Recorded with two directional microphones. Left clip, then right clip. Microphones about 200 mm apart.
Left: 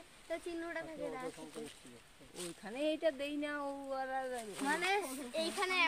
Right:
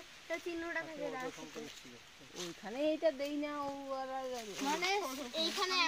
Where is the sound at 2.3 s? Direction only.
25° right (ahead or behind).